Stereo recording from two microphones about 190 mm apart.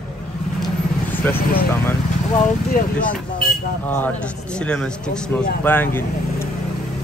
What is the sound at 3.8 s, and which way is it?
Speech, 10° left (ahead or behind).